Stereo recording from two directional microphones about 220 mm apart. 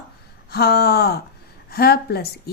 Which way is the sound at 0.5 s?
45° left (ahead or behind).